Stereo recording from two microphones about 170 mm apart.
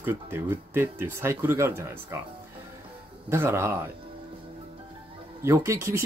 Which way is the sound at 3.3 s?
15° right (ahead or behind).